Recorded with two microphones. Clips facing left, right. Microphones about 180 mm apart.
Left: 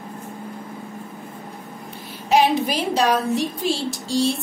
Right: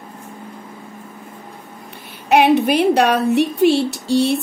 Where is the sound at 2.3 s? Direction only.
65° right (ahead or behind).